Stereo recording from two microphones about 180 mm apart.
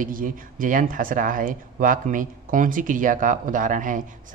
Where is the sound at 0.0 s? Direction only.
50° right (ahead or behind).